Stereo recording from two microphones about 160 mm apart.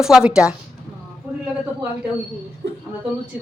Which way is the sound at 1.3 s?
10° right (ahead or behind).